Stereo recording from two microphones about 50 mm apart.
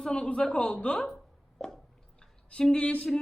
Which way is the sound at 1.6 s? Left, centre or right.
Centre.